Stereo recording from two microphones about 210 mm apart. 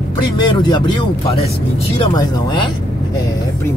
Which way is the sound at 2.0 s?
20° left (ahead or behind).